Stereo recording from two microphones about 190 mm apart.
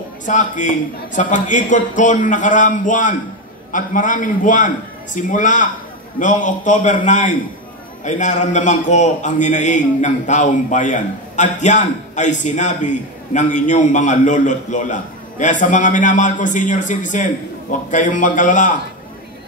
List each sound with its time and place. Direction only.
0.2 s a man's voice: 40° left (ahead or behind)